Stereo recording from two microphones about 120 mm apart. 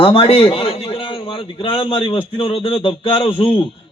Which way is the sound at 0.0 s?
50° left (ahead or behind).